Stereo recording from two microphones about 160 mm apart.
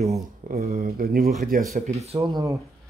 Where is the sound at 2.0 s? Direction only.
40° right (ahead or behind).